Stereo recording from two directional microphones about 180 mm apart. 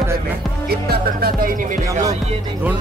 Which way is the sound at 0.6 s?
60° right (ahead or behind).